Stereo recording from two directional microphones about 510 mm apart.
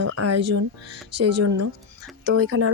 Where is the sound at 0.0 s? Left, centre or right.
Right.